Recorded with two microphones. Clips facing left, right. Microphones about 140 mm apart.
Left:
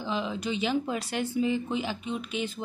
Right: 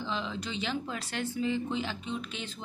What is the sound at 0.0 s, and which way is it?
Speech, 10° left (ahead or behind).